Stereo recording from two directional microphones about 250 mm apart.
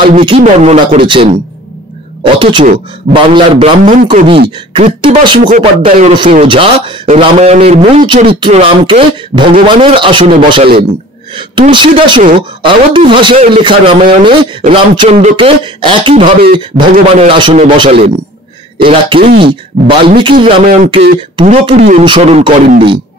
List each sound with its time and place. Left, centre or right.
0.4 s a man's voice: right